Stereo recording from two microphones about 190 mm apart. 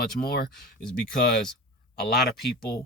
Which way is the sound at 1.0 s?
55° left (ahead or behind).